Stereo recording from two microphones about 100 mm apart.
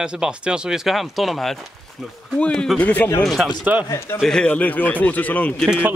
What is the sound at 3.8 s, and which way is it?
Speech, 30° left (ahead or behind).